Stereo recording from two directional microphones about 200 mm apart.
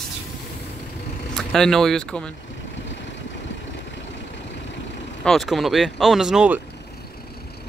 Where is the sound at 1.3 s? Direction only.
Centre (ahead or behind).